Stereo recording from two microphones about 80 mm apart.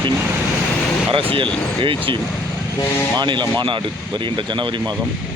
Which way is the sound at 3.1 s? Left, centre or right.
Right.